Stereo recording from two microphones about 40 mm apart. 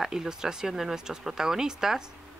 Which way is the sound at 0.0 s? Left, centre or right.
Centre.